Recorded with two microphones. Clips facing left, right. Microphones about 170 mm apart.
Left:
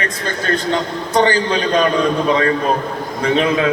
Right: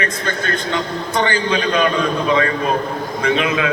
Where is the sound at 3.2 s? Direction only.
35° left (ahead or behind).